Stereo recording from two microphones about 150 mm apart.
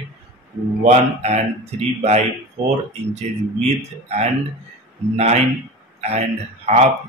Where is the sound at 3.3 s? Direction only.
50° right (ahead or behind).